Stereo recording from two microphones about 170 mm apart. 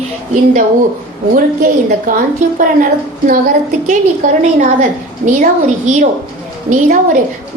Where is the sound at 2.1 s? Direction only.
55° right (ahead or behind).